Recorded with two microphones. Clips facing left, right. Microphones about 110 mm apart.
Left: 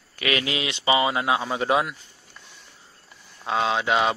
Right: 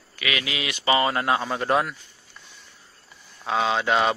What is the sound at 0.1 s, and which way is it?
Speech, 35° left (ahead or behind).